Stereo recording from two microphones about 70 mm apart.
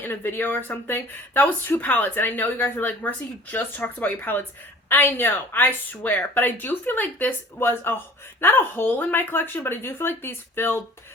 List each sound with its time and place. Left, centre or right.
0.0 s speech: left